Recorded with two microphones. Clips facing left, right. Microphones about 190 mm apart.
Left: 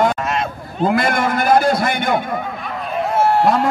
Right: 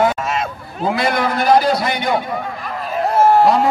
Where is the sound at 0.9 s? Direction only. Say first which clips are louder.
Even; 50° left (ahead or behind).